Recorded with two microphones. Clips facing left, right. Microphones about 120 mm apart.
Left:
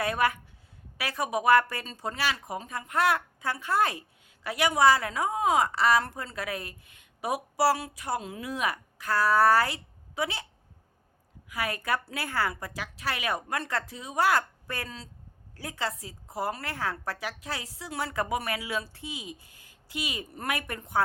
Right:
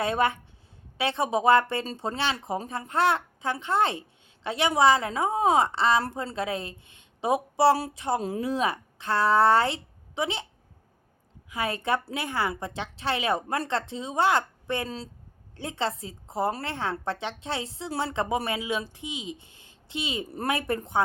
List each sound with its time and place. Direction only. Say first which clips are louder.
0.0 s a woman's voice: right 2 dB; 25° right (ahead or behind)
11.4 s a woman's voice: right 3 dB; 25° right (ahead or behind)